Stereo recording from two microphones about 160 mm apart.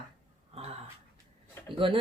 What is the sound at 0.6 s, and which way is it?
Speech, 40° right (ahead or behind).